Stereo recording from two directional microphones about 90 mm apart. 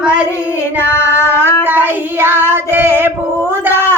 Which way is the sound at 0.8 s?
30° left (ahead or behind).